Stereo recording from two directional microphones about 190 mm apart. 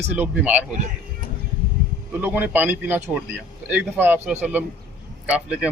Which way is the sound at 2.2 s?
10° right (ahead or behind).